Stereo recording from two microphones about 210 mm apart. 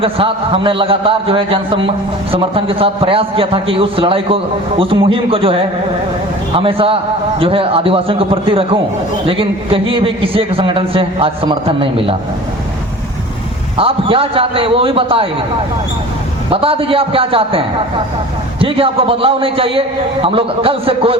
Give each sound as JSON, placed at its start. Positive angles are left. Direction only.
{"t": 0.0, "sound": "a man's voice", "side_deg": -25}
{"t": 13.7, "sound": "a man's voice", "side_deg": -25}
{"t": 16.5, "sound": "a man's voice", "side_deg": -25}
{"t": 18.6, "sound": "a man's voice", "side_deg": -25}